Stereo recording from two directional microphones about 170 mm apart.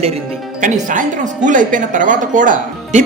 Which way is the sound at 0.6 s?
50° right (ahead or behind).